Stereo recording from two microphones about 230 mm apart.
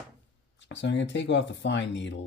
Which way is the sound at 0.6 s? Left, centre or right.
Left.